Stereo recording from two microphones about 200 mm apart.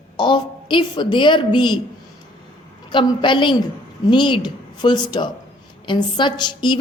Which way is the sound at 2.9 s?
25° left (ahead or behind).